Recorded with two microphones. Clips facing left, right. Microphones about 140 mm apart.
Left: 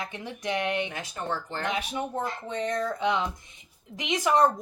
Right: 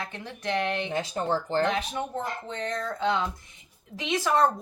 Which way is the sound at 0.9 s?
30° right (ahead or behind).